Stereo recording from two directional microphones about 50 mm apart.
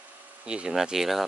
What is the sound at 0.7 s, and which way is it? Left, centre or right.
Speech, centre.